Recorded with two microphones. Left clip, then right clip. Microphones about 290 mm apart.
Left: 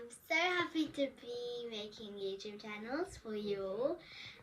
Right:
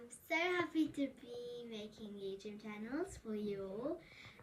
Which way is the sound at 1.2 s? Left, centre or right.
Centre.